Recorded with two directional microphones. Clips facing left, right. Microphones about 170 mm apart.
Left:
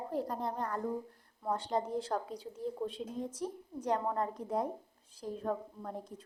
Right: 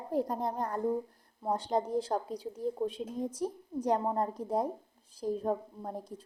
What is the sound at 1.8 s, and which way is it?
A woman's voice, 40° right (ahead or behind).